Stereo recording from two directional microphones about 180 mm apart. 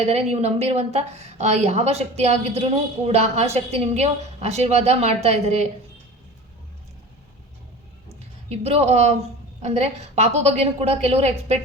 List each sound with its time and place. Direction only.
0.0 s a woman's voice: 40° right (ahead or behind)
8.4 s a woman's voice: 35° right (ahead or behind)